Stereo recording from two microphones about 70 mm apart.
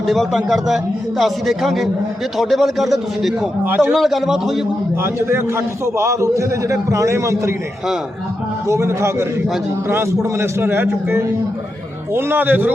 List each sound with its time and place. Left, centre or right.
0.1 s a man's voice: centre
3.6 s a man's voice: right
3.9 s a man's voice: centre
5.0 s a man's voice: right
8.6 s a man's voice: right